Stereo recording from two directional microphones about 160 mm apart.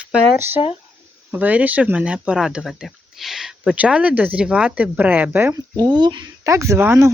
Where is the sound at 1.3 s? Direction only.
10° right (ahead or behind).